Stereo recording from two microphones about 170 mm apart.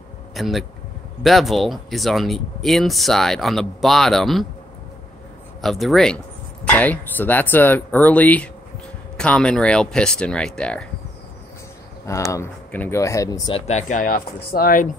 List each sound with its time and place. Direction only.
0.3 s speech: centre (ahead or behind)
5.6 s speech: centre (ahead or behind)
12.3 s speech: 15° left (ahead or behind)
13.6 s speech: 40° left (ahead or behind)